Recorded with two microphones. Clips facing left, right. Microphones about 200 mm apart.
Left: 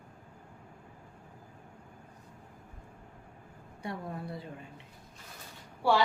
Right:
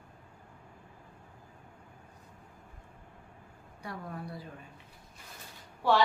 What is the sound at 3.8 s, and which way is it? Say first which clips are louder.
Speech: left 3 dB; 25° left (ahead or behind).